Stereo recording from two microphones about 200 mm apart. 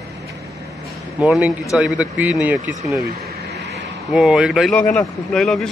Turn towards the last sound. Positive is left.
turn(degrees=0)  # may be behind; listen again after turning